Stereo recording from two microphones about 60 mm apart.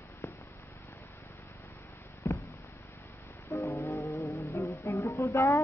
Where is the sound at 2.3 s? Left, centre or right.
Left.